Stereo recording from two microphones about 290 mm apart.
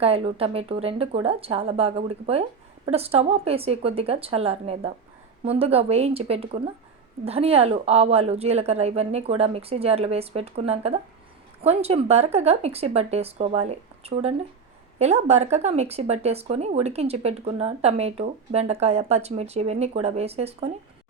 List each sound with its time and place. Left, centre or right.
0.0 s speech: centre